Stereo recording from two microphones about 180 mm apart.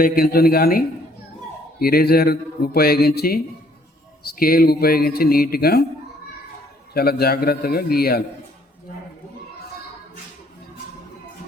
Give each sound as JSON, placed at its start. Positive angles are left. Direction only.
{"t": 0.0, "sound": "a man's voice", "side_deg": 55}
{"t": 1.8, "sound": "a man's voice", "side_deg": 55}
{"t": 6.9, "sound": "a man's voice", "side_deg": 60}